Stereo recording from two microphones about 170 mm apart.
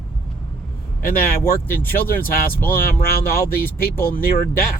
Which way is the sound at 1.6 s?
10° left (ahead or behind).